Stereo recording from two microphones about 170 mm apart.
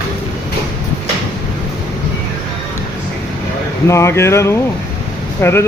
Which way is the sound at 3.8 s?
15° left (ahead or behind).